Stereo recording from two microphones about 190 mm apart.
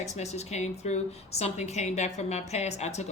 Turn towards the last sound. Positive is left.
turn(degrees=35)  # may be behind; listen again after turning